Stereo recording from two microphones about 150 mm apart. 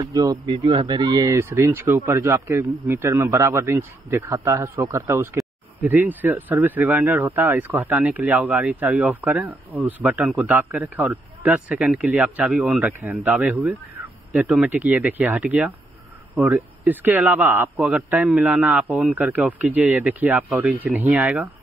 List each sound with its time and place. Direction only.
0.1 s a man's voice: 25° right (ahead or behind); by 21.5 s 10° right (ahead or behind)